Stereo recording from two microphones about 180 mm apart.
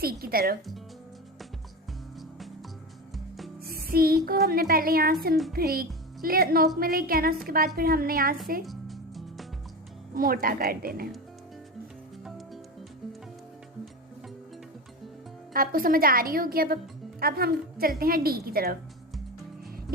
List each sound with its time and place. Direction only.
0.0 s a woman's voice: 55° right (ahead or behind)
3.7 s music: 55° right (ahead or behind)
4.3 s a woman's voice: 55° right (ahead or behind)
8.6 s music: centre (ahead or behind)
10.2 s a woman's voice: 55° right (ahead or behind)
15.5 s a woman's voice: 55° right (ahead or behind)